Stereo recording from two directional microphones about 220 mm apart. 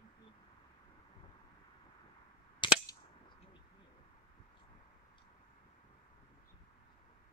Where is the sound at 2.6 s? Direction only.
20° left (ahead or behind).